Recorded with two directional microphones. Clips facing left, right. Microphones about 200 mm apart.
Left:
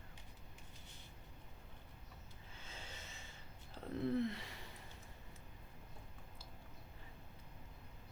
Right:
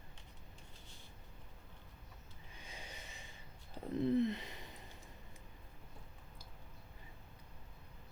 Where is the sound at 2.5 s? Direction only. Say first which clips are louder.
Right 2 dB; 15° right (ahead or behind).